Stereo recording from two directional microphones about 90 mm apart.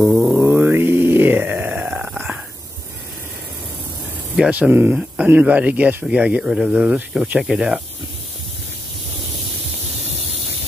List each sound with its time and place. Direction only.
0.0 s music: 5° right (ahead or behind)
0.4 s grunt: 20° right (ahead or behind)
4.5 s speech: 20° right (ahead or behind)